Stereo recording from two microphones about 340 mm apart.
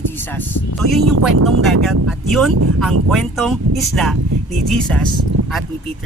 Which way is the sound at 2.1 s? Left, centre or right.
Centre.